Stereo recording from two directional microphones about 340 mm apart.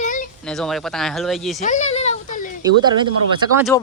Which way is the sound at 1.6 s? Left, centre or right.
Left.